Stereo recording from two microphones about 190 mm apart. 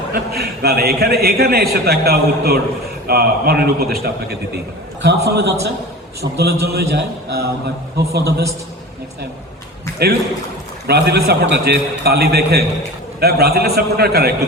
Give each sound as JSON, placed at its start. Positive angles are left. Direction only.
{"t": 0.1, "sound": "a man's voice", "side_deg": -55}
{"t": 10.8, "sound": "a man's voice", "side_deg": -60}